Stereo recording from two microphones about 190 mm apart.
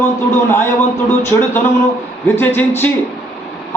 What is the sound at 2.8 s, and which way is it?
Speech, 10° left (ahead or behind).